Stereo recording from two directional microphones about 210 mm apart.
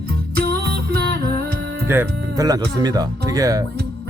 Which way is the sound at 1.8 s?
15° right (ahead or behind).